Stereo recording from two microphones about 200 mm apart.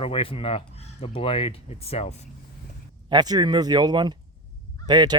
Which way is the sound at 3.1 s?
20° right (ahead or behind).